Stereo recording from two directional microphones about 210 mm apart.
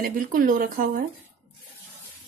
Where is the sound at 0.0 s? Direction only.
40° right (ahead or behind).